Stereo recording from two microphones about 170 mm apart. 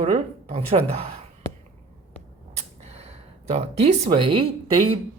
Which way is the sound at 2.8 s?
40° right (ahead or behind).